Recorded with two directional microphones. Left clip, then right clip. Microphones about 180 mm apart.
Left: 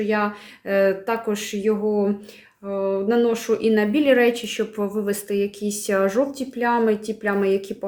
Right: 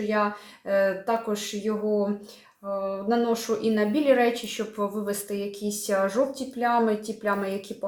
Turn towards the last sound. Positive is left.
turn(degrees=55)  # may be behind; listen again after turning